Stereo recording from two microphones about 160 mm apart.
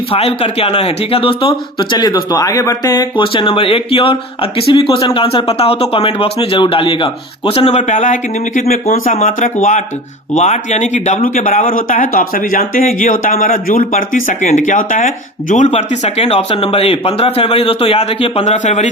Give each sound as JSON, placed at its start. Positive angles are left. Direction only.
{"t": 0.1, "sound": "speech", "side_deg": 35}
{"t": 7.5, "sound": "speech", "side_deg": 45}
{"t": 9.1, "sound": "speech", "side_deg": 50}